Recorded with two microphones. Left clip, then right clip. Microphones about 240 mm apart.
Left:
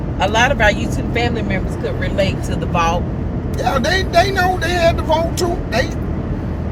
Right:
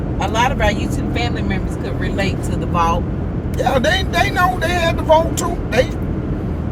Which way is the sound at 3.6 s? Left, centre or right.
Centre.